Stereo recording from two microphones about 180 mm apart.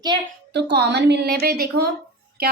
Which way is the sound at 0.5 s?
70° right (ahead or behind).